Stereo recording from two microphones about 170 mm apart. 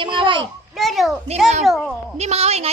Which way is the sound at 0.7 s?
Centre (ahead or behind).